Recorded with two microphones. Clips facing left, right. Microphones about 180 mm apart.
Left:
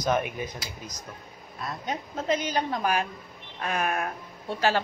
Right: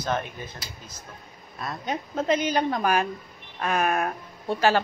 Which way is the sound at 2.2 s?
60° right (ahead or behind).